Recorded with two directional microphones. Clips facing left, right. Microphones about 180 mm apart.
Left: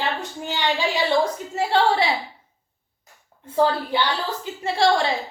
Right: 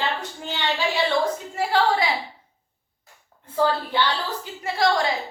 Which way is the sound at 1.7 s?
30° left (ahead or behind).